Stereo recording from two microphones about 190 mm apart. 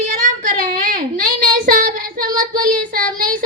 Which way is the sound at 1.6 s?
45° right (ahead or behind).